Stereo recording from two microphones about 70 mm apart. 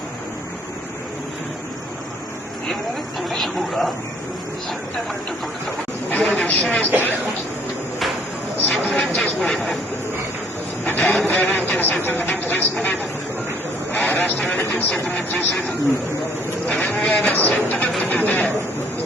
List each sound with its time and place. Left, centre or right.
3.2 s speech: centre
6.1 s a woman's voice: centre
8.7 s speech: centre
10.8 s a sound: left
11.3 s a man's voice: left
16.8 s a man's voice: centre